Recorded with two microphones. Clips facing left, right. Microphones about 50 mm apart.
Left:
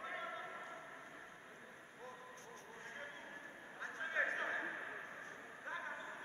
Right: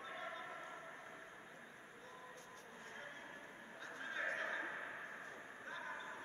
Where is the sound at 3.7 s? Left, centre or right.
Left.